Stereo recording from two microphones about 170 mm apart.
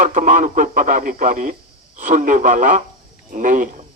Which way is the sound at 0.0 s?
45° right (ahead or behind).